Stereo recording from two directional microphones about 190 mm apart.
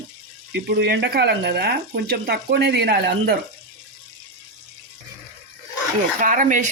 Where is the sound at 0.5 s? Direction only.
60° right (ahead or behind).